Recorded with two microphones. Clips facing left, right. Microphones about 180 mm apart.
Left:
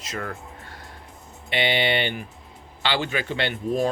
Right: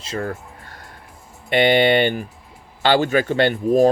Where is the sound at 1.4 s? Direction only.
45° right (ahead or behind).